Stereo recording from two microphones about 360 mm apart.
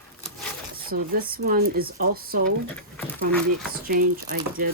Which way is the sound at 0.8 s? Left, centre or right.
Right.